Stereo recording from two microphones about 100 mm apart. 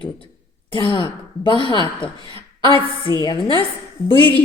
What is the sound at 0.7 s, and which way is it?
A woman's voice, 60° left (ahead or behind).